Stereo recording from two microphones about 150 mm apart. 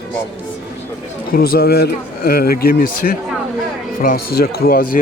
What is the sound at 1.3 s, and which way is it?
Speech, 90° left.